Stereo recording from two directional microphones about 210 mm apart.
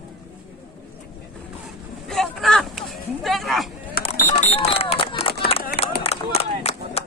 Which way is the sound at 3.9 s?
40° left (ahead or behind).